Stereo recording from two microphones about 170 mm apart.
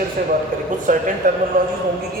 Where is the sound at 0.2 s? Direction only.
55° right (ahead or behind).